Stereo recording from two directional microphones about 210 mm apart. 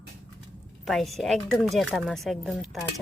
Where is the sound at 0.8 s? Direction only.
Centre (ahead or behind).